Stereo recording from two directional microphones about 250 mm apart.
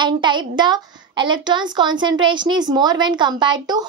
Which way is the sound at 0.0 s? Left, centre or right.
Centre.